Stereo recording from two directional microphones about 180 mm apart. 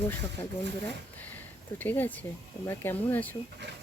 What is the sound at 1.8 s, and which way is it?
Speech, 10° left (ahead or behind).